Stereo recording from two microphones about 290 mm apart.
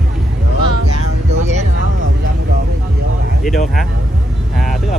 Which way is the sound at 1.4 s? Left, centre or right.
Right.